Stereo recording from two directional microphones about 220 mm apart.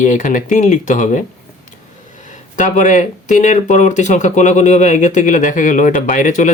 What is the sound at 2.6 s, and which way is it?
Speech, 35° left (ahead or behind).